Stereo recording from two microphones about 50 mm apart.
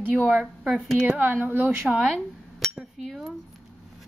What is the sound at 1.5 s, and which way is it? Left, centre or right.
Speech, right.